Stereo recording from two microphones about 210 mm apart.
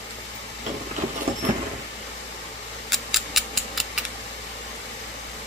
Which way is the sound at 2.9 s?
Centre (ahead or behind).